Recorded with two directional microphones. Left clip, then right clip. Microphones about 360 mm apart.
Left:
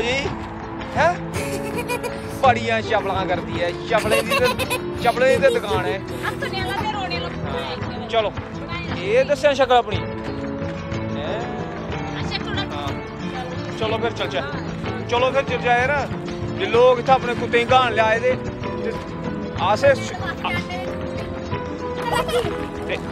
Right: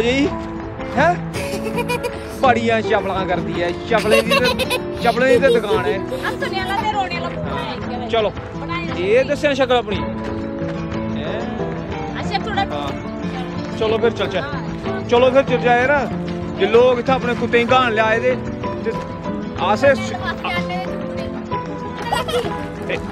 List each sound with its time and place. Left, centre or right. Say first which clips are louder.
0.0 s speech: right 5 dB; centre
2.4 s speech: right 2 dB; centre
6.2 s speech: right 1 dB; centre
9.0 s speech: right 1 dB; centre
13.7 s speech: right 6 dB; centre
19.6 s speech: right 2 dB; centre